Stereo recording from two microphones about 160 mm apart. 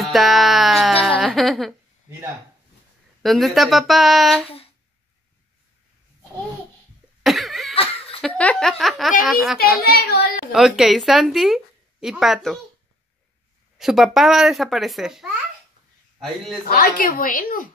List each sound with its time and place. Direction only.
0.0 s a sound: centre (ahead or behind)
3.2 s a woman's voice: centre (ahead or behind)
7.2 s cough: centre (ahead or behind)
7.7 s laughter: 35° left (ahead or behind)
8.2 s a woman's voice: 10° left (ahead or behind)
9.8 s speech: 75° left (ahead or behind)
10.5 s a woman's voice: centre (ahead or behind)
13.7 s a woman's voice: 5° right (ahead or behind)
16.6 s a woman's voice: 65° left (ahead or behind)